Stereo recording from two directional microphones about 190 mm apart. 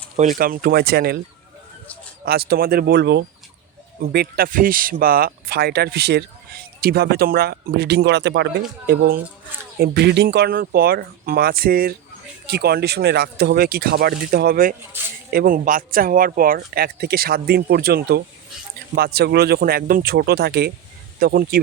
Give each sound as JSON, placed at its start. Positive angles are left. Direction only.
{"t": 0.2, "sound": "speech", "side_deg": -45}
{"t": 2.2, "sound": "speech", "side_deg": -55}
{"t": 9.7, "sound": "speech", "side_deg": -55}